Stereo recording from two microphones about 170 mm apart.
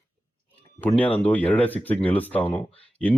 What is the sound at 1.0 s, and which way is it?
Speech, 10° left (ahead or behind).